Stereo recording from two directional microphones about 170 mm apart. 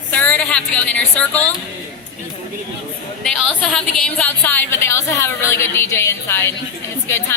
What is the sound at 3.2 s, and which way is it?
A woman's voice, 5° left (ahead or behind).